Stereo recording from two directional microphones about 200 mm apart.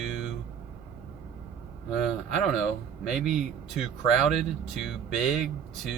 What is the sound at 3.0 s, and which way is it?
Speech, centre (ahead or behind).